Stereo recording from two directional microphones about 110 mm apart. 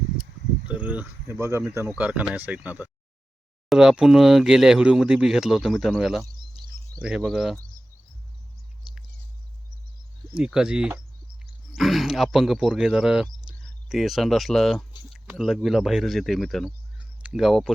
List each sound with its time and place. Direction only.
0.7 s speech: 15° right (ahead or behind)
1.3 s speech: 25° right (ahead or behind); by 7.5 s 5° right (ahead or behind)
8.8 s a sound: 5° right (ahead or behind)
10.3 s speech: 5° right (ahead or behind)
13.5 s cricket: 10° right (ahead or behind)
13.8 s speech: 5° right (ahead or behind)
17.0 s a sound: 5° right (ahead or behind)